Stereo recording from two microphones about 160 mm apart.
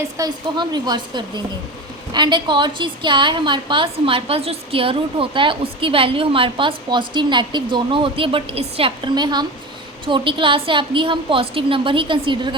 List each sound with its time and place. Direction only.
0.2 s a woman's voice: 25° right (ahead or behind)